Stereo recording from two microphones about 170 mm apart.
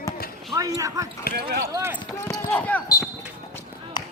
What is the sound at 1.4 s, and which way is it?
Basketball bounce, 65° right (ahead or behind).